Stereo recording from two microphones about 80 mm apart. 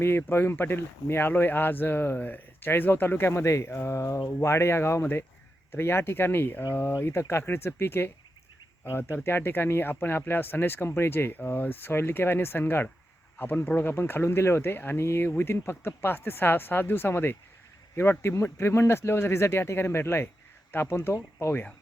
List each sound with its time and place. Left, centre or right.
0.0 s speech: left